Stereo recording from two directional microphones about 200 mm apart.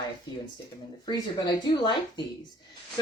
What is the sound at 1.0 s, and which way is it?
Speech, 20° left (ahead or behind).